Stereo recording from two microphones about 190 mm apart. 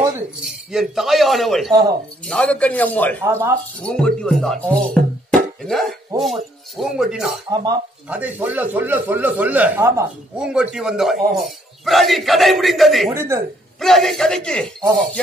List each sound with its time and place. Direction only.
0.4 s a man's voice: centre (ahead or behind)
3.3 s speech: 15° right (ahead or behind)
3.8 s a man's voice: 5° left (ahead or behind)
7.4 s speech: 20° right (ahead or behind)
8.1 s a man's voice: 10° right (ahead or behind)
13.1 s speech: 15° right (ahead or behind)
13.7 s a man's voice: centre (ahead or behind)